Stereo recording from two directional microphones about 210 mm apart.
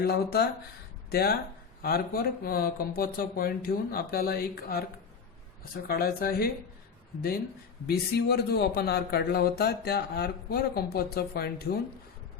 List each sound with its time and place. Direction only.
0.0 s speech: 50° left (ahead or behind)
5.9 s speech: 45° left (ahead or behind)
7.9 s speech: 50° left (ahead or behind)